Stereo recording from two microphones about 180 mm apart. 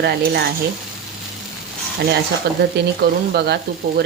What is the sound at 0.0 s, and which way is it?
Cutlery, 60° right (ahead or behind).